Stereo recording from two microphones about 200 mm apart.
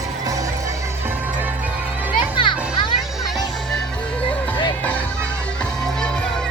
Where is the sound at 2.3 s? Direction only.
25° left (ahead or behind).